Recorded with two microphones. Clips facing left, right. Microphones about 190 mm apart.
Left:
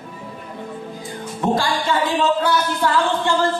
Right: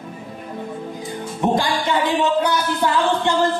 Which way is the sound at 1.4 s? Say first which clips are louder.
Even; 20° right (ahead or behind).